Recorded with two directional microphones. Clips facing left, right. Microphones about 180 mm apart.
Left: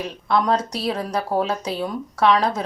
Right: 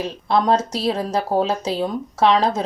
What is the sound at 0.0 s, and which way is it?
Speech, 30° right (ahead or behind).